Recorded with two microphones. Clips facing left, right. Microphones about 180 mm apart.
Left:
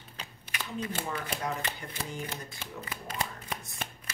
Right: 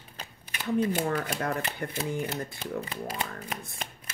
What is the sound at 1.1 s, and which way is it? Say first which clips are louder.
Speech: right 5 dB; 60° right (ahead or behind).